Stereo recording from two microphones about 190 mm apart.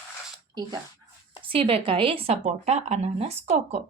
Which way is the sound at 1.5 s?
30° right (ahead or behind).